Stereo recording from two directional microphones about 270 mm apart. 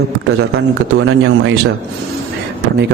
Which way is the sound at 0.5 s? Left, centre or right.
Right.